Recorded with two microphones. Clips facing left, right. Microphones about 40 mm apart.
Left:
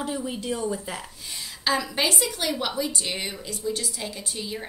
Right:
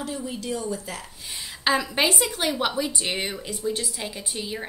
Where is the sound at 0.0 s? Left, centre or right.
Centre.